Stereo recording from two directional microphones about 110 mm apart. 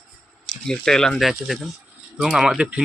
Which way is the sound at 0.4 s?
5° left (ahead or behind).